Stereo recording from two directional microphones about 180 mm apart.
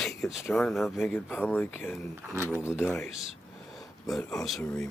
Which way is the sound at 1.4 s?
10° left (ahead or behind).